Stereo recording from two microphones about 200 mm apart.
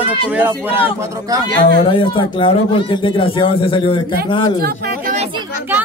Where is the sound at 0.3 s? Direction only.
10° right (ahead or behind).